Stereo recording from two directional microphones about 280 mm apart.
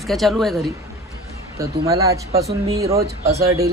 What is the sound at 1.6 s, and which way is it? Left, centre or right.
Speech, centre.